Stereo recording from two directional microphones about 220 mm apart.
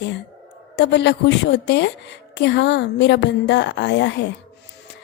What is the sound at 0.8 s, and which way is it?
A woman's voice, 50° left (ahead or behind).